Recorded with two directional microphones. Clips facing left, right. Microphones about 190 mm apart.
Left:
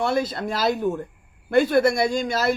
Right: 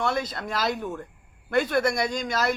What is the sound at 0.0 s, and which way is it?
A woman's voice, 30° left (ahead or behind).